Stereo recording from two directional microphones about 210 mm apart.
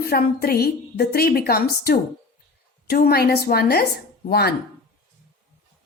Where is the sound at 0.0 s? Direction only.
45° left (ahead or behind).